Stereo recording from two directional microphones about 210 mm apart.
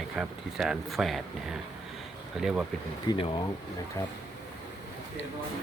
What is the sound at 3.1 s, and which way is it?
Speech, 20° left (ahead or behind).